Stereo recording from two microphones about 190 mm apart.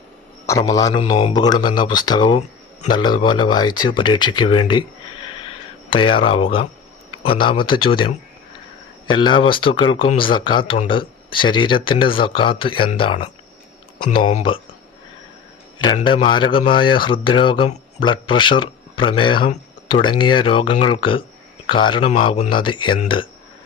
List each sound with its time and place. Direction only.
0.4 s speech: 15° left (ahead or behind)
16.0 s speech: 25° left (ahead or behind)